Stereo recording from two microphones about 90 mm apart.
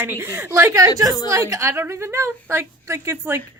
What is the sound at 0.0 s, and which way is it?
A woman's voice, 25° right (ahead or behind).